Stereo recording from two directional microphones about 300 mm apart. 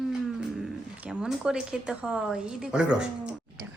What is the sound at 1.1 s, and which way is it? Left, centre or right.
A woman's voice, centre.